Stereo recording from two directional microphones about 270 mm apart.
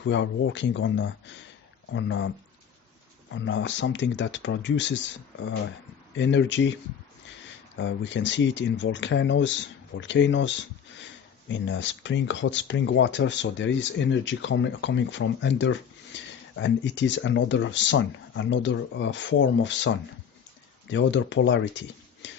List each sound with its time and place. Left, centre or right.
0.0 s speech: left
3.3 s speech: left
7.8 s speech: left